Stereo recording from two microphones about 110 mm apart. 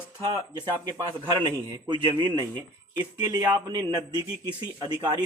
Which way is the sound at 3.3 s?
35° right (ahead or behind).